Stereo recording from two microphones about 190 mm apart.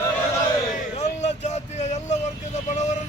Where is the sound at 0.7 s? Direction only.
40° left (ahead or behind).